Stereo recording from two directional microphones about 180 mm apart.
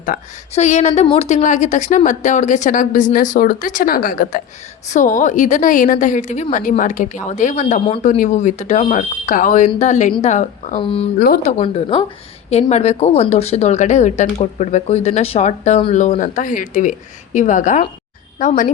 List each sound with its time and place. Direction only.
0.0 s speech: 45° left (ahead or behind)
10.8 s speech: 30° left (ahead or behind)
11.2 s speech: 55° left (ahead or behind)
11.5 s speech: 35° left (ahead or behind)